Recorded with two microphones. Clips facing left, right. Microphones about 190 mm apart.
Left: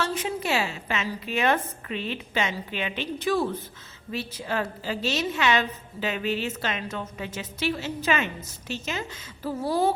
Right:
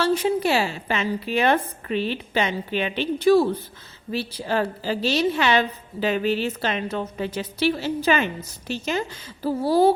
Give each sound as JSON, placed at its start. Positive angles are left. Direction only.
{"t": 0.0, "sound": "a woman's voice", "side_deg": -35}